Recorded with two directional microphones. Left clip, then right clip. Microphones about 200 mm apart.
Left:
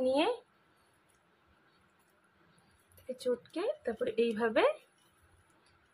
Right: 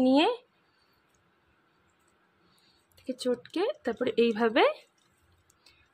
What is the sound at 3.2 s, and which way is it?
Speech, 50° right (ahead or behind).